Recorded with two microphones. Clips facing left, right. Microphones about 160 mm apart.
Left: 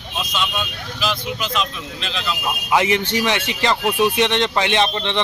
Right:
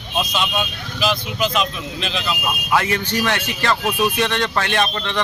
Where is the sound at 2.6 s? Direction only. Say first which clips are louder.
Left 2 dB; 20° left (ahead or behind).